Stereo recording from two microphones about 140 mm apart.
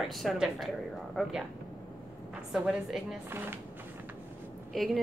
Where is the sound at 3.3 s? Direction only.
15° right (ahead or behind).